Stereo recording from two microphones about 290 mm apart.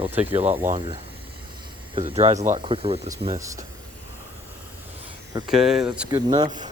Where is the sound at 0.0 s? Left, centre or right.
Centre.